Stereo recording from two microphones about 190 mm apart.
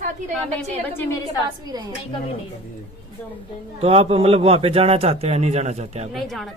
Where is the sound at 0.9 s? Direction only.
15° left (ahead or behind).